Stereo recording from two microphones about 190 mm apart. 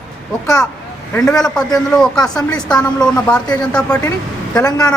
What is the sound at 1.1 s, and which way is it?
A man's voice, centre (ahead or behind).